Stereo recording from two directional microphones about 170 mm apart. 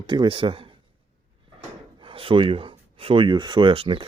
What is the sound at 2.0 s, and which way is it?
Speech, 30° right (ahead or behind).